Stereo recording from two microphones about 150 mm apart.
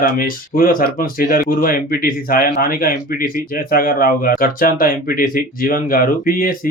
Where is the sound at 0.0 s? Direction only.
70° left (ahead or behind).